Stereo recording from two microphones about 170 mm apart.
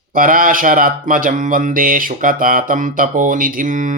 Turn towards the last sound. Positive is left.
turn(degrees=-50)  # may be behind; listen again after turning